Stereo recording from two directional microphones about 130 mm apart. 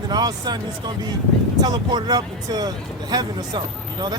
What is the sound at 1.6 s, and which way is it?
Speech, 30° right (ahead or behind).